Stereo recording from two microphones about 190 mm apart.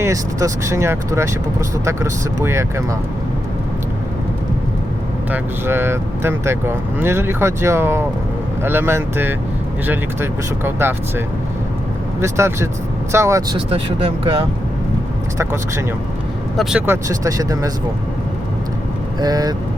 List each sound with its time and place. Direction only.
0.0 s speech: 15° right (ahead or behind)
5.3 s speech: 10° right (ahead or behind)
12.2 s speech: 15° right (ahead or behind)
13.7 s speech: 30° right (ahead or behind)
16.6 s speech: 5° right (ahead or behind)
19.2 s speech: 20° right (ahead or behind)